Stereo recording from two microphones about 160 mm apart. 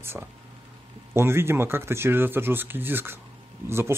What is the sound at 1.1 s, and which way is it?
Speech, 15° right (ahead or behind).